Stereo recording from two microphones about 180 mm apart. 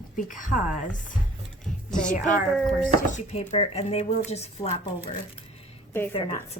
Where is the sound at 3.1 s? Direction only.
40° left (ahead or behind).